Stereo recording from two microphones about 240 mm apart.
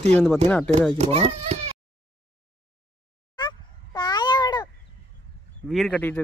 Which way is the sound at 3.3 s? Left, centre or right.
Centre.